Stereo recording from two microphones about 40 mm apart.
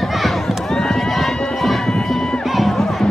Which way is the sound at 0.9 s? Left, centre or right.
Centre.